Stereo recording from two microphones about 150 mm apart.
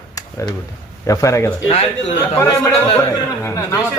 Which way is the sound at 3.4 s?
20° left (ahead or behind).